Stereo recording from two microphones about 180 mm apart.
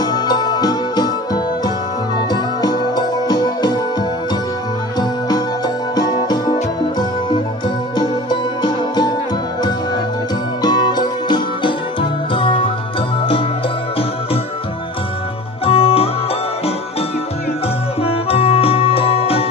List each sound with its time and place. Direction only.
0.0 s music: 25° left (ahead or behind)
5.9 s music: 25° left (ahead or behind)
8.0 s music: 25° left (ahead or behind)
10.6 s music: 25° left (ahead or behind)
15.6 s music: 30° left (ahead or behind)
18.0 s music: 30° left (ahead or behind)